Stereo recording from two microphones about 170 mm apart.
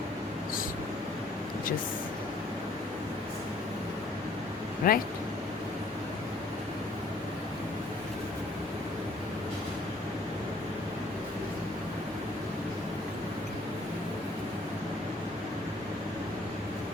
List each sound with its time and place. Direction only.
4.8 s speech: 55° left (ahead or behind)